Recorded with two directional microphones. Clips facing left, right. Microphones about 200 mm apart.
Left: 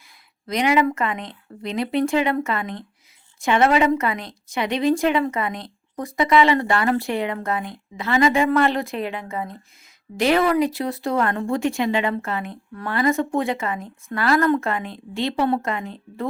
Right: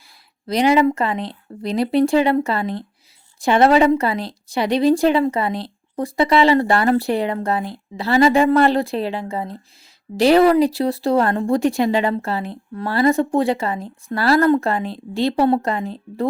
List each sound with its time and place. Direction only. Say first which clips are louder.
0.4 s speech: right 4 dB; 35° right (ahead or behind)